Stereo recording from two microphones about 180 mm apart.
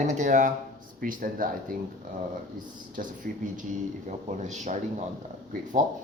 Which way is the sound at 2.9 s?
45° right (ahead or behind).